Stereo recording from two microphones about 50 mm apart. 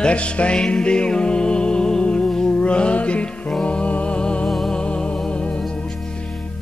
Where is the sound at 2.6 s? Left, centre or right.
Left.